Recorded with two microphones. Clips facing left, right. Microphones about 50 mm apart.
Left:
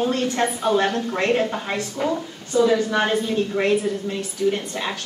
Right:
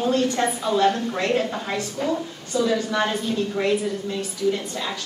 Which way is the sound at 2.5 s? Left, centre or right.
Left.